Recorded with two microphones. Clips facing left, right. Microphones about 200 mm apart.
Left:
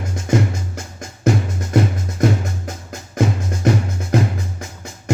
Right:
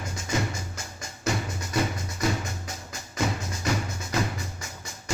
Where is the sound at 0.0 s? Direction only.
55° left (ahead or behind).